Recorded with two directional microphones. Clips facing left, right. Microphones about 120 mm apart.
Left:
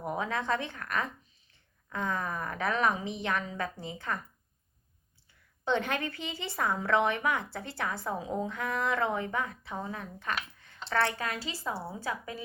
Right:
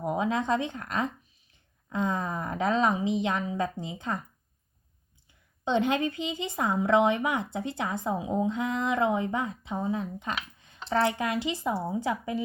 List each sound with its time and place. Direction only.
0.0 s speech: 20° right (ahead or behind)
5.6 s speech: 20° right (ahead or behind)